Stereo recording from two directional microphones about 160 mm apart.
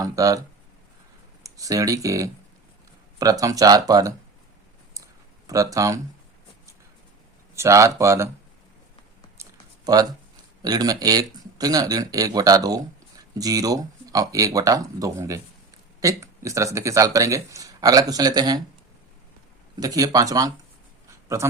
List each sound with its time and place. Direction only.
0.0 s speech: 20° right (ahead or behind)
1.5 s speech: 20° right (ahead or behind)
5.5 s speech: 20° right (ahead or behind)
7.5 s speech: 20° right (ahead or behind)
9.4 s a sound: 25° right (ahead or behind)
10.6 s speech: 25° right (ahead or behind)
19.8 s speech: 25° right (ahead or behind)